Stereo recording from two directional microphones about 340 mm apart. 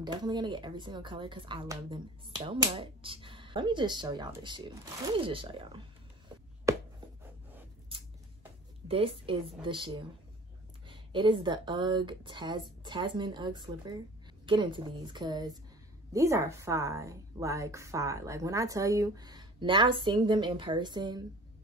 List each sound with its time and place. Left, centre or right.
0.0 s a woman's voice: centre
7.9 s a sound: centre
8.8 s a woman's voice: centre